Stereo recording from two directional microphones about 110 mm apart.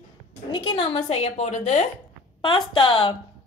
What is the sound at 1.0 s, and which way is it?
Speech, 65° left (ahead or behind).